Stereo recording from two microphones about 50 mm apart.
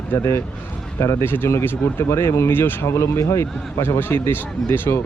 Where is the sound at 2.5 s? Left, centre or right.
Left.